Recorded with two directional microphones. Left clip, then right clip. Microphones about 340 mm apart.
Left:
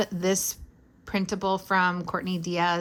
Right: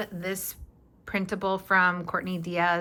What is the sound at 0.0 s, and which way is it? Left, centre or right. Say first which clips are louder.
A woman's voice: left 7 dB; centre.